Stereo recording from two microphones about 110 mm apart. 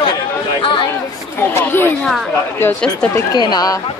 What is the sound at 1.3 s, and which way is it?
Speech, 20° left (ahead or behind).